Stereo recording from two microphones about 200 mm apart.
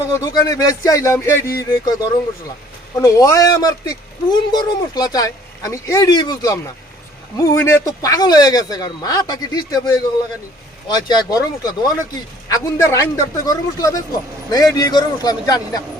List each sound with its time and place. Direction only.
0.1 s speech: 15° left (ahead or behind)